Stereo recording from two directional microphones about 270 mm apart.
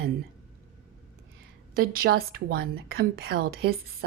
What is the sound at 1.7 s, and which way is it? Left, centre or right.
Speech, right.